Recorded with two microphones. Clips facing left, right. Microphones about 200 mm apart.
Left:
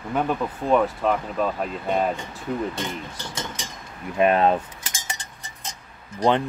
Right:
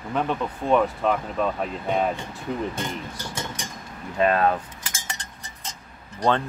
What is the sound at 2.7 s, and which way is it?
Speech, 10° right (ahead or behind).